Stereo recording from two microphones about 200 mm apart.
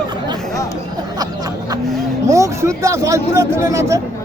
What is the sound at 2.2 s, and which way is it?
A man's voice, 15° right (ahead or behind).